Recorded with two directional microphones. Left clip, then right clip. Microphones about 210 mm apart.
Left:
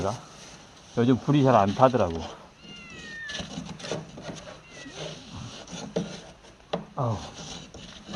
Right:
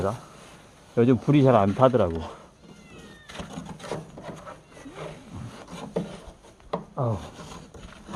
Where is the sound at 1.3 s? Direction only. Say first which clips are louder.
Left 1 dB; 50° right (ahead or behind).